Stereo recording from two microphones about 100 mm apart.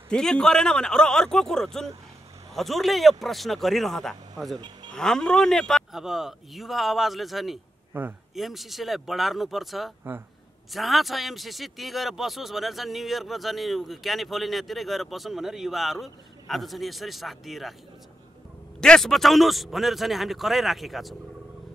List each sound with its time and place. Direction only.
0.1 s a man's voice: 5° left (ahead or behind)
7.9 s a man's voice: 20° right (ahead or behind)
8.4 s a man's voice: centre (ahead or behind)
18.8 s a man's voice: 5° left (ahead or behind)